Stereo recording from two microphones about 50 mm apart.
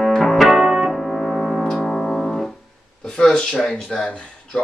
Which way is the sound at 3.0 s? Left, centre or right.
Centre.